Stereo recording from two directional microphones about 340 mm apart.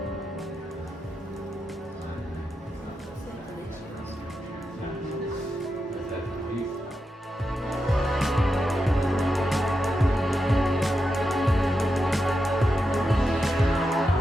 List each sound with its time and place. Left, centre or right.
7.5 s music: centre